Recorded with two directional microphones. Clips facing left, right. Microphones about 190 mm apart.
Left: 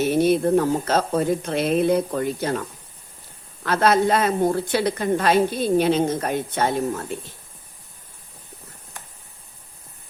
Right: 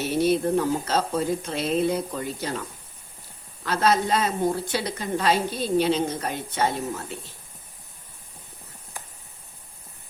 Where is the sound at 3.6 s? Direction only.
55° left (ahead or behind).